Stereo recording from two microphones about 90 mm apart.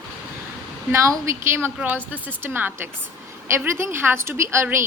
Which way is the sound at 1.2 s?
30° right (ahead or behind).